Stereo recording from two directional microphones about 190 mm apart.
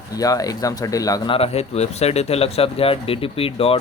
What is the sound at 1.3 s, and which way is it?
Speech, 35° left (ahead or behind).